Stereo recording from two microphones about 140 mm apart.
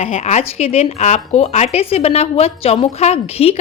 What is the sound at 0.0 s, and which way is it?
Speech, 50° left (ahead or behind).